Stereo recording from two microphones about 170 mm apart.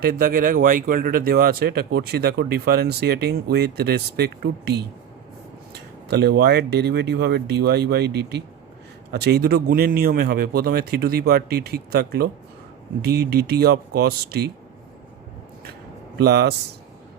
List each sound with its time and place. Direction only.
0.0 s speech: 60° right (ahead or behind)
6.1 s speech: 75° right (ahead or behind)
9.2 s speech: 70° right (ahead or behind)
13.3 s speech: 70° right (ahead or behind)
16.2 s speech: 70° right (ahead or behind)